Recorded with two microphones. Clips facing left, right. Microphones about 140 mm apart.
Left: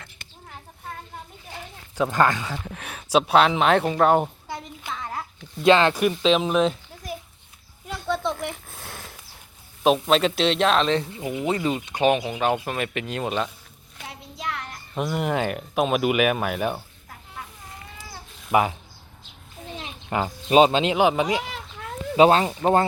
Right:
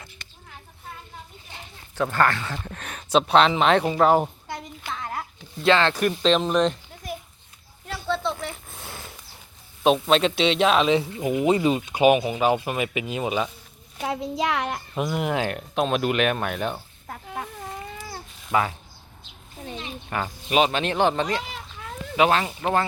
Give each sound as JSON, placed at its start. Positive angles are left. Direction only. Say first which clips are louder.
{"t": 2.0, "sound": "speech", "louder": "left 1 dB", "side_deg": 15}
{"t": 2.6, "sound": "a sound", "louder": "even", "side_deg": 5}
{"t": 5.6, "sound": "a child's voice", "louder": "left 3 dB", "side_deg": 15}
{"t": 8.0, "sound": "a sound", "louder": "left 1 dB", "side_deg": 15}
{"t": 8.7, "sound": "sniff", "louder": "even", "side_deg": 0}
{"t": 9.8, "sound": "speech", "louder": "even", "side_deg": 0}
{"t": 11.2, "sound": "speech", "louder": "right 4 dB", "side_deg": -20}
{"t": 14.0, "sound": "a child's voice", "louder": "right 9 dB", "side_deg": -90}
{"t": 14.9, "sound": "speech", "louder": "left 1 dB", "side_deg": 0}
{"t": 18.5, "sound": "speech", "louder": "left 3 dB", "side_deg": 15}
{"t": 20.1, "sound": "speech", "louder": "left 5 dB", "side_deg": 20}
{"t": 22.1, "sound": "speech", "louder": "left 4 dB", "side_deg": 30}